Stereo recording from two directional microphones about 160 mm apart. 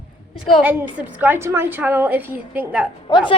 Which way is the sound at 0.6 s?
10° right (ahead or behind).